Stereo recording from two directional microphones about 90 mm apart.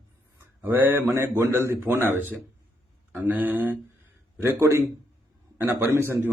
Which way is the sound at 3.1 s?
20° right (ahead or behind).